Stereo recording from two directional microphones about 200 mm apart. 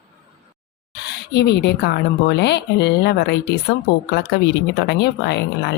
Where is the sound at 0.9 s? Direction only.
55° left (ahead or behind).